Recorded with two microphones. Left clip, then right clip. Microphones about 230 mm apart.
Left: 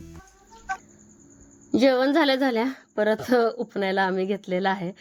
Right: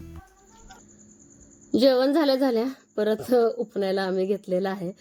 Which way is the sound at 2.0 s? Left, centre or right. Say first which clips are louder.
Even; centre.